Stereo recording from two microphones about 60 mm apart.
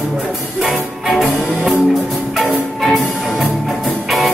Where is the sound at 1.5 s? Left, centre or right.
Centre.